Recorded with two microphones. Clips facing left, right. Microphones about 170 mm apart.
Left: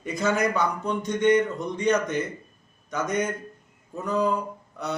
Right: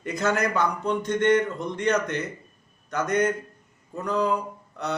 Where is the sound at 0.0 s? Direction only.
10° left (ahead or behind).